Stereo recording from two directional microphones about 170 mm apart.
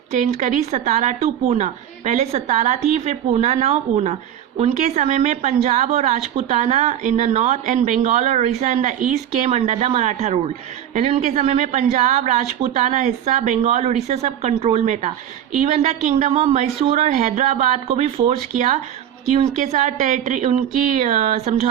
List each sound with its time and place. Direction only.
0.1 s a woman's voice: 45° right (ahead or behind)